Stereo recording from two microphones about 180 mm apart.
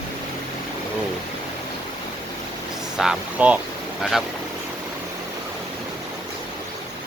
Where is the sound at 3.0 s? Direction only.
5° right (ahead or behind).